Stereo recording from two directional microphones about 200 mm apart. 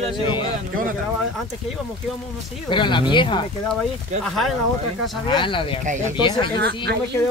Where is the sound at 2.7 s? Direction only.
25° left (ahead or behind).